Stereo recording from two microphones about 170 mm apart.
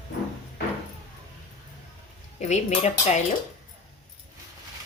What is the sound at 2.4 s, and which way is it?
Speech, 40° left (ahead or behind).